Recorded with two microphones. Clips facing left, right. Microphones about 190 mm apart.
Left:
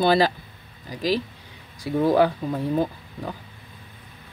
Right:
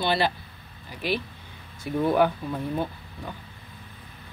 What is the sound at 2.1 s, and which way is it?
Speech, 90° left.